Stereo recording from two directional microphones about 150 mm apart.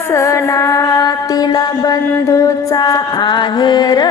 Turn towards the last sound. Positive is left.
turn(degrees=25)  # may be behind; listen again after turning